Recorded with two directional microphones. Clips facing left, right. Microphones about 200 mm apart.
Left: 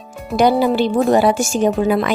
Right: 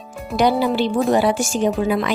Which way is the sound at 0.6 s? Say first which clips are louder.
Left 3 dB; 45° left (ahead or behind).